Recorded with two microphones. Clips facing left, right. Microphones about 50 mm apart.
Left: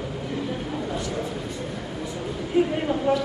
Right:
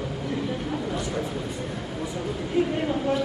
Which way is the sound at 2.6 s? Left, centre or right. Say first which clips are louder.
Left 3 dB; left.